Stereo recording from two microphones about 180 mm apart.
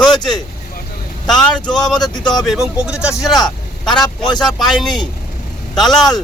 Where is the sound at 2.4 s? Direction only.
Centre (ahead or behind).